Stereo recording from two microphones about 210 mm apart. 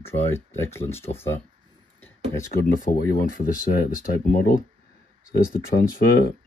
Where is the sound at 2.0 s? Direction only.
10° left (ahead or behind).